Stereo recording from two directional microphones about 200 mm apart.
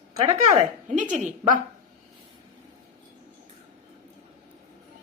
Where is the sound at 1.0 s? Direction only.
40° right (ahead or behind).